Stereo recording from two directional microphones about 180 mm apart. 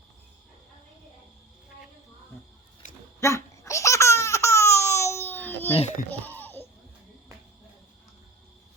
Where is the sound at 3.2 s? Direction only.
15° left (ahead or behind).